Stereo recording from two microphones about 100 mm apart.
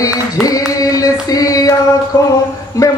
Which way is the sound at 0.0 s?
35° left (ahead or behind).